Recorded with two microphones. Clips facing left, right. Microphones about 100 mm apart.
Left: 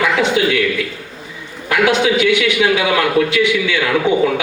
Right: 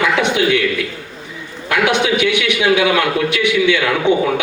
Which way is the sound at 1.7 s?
25° right (ahead or behind).